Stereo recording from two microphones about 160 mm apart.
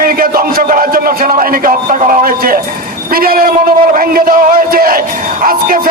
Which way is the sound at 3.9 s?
65° right (ahead or behind).